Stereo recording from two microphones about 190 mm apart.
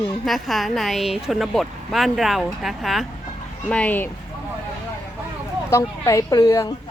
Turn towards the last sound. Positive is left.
turn(degrees=15)  # may be behind; listen again after turning